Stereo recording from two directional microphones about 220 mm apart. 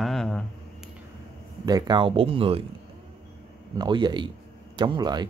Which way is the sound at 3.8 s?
20° right (ahead or behind).